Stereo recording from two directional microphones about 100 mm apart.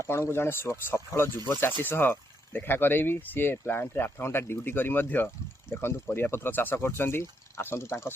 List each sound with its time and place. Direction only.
0.1 s speech: 25° left (ahead or behind)